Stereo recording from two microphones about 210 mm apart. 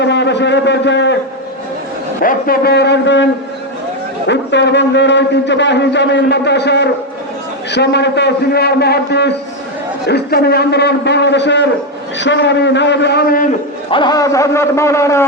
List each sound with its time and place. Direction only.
0.0 s a man's voice: 55° left (ahead or behind)
2.2 s a man's voice: 45° left (ahead or behind)
4.3 s a man's voice: 55° left (ahead or behind)
13.9 s a man's voice: 20° left (ahead or behind)